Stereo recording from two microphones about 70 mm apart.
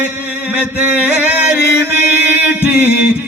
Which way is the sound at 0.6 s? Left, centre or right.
Centre.